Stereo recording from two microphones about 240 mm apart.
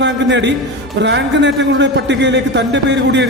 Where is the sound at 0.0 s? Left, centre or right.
Right.